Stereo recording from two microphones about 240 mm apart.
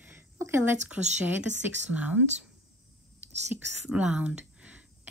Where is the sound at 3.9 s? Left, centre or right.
Centre.